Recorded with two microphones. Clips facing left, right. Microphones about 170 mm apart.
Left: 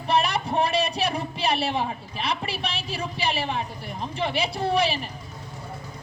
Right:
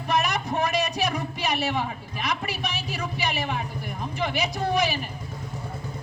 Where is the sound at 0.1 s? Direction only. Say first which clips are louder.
Left 2 dB; 30° left (ahead or behind).